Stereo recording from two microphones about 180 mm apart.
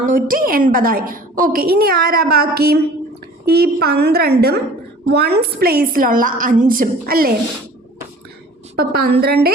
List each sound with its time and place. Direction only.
0.0 s a woman's voice: 50° right (ahead or behind)
8.7 s a woman's voice: 55° right (ahead or behind)